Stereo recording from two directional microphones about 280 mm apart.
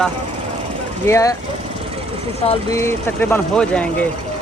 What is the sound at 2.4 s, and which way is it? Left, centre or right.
Speech, centre.